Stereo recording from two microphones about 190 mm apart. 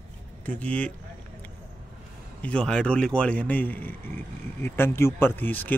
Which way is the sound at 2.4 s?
5° left (ahead or behind).